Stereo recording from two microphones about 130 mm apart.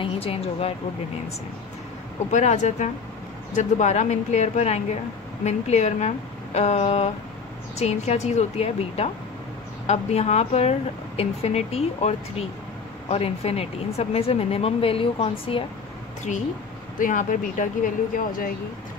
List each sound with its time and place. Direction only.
0.0 s speech: 50° left (ahead or behind)
2.3 s speech: 65° left (ahead or behind); by 15.6 s 45° left (ahead or behind)
16.3 s speech: 5° right (ahead or behind)
17.0 s speech: 90° left